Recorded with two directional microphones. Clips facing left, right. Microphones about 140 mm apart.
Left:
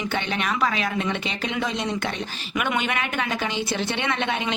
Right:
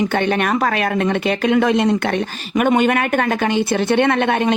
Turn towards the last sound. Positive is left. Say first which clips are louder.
# right 9 dB
turn(degrees=-50)  # may be behind; listen again after turning